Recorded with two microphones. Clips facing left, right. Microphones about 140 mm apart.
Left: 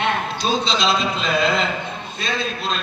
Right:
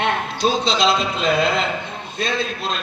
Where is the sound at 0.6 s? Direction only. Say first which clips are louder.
Right 2 dB; 60° right (ahead or behind).